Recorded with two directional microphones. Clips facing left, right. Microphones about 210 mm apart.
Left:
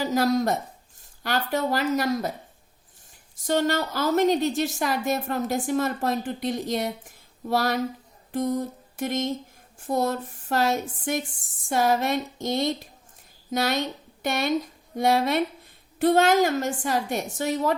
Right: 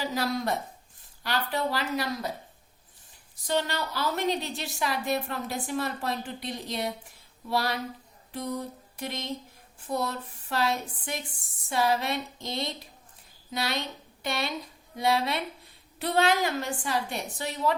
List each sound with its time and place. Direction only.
0.0 s a woman's voice: 45° left (ahead or behind)
3.3 s a woman's voice: 45° left (ahead or behind)
8.3 s mantra: 45° left (ahead or behind)
9.8 s a woman's voice: 45° left (ahead or behind)